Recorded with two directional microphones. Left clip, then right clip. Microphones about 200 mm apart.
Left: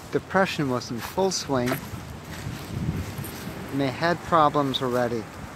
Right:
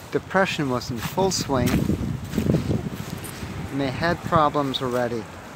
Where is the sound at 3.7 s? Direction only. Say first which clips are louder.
Even; centre (ahead or behind).